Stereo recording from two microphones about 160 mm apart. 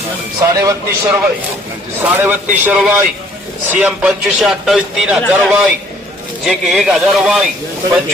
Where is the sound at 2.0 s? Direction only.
10° right (ahead or behind).